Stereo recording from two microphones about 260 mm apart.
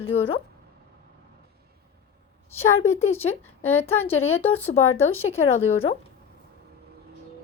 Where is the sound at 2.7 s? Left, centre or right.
Left.